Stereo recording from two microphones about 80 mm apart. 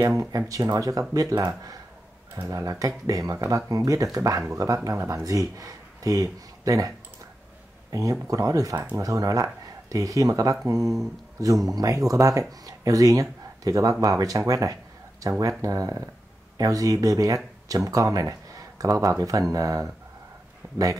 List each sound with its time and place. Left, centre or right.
0.0 s speech: right
7.9 s speech: right